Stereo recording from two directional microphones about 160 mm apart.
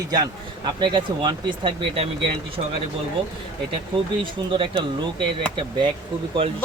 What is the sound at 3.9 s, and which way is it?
Speech, 30° right (ahead or behind).